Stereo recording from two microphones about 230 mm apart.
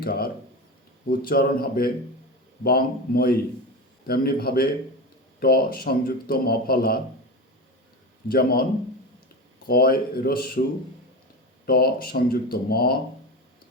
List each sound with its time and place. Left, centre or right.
0.0 s a sound: left
1.0 s a man's voice: left
8.3 s a man's voice: left
9.6 s a man's voice: left
11.6 s a man's voice: left